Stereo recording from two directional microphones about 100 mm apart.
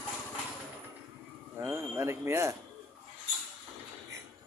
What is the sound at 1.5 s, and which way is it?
Speech, 25° right (ahead or behind).